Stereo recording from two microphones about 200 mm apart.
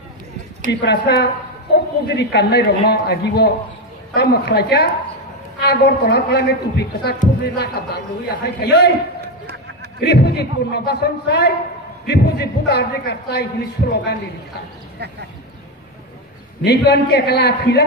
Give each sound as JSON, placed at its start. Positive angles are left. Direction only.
{"t": 0.7, "sound": "a man's voice", "side_deg": 55}
{"t": 9.9, "sound": "a man's voice", "side_deg": 55}
{"t": 16.6, "sound": "a man's voice", "side_deg": 55}